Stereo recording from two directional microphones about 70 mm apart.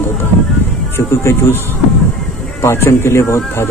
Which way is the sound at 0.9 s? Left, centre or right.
Left.